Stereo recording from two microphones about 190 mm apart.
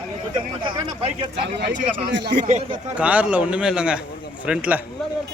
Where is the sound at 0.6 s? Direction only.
25° right (ahead or behind).